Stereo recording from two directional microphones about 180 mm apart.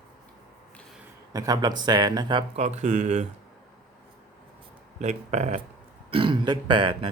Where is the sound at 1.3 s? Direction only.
20° right (ahead or behind).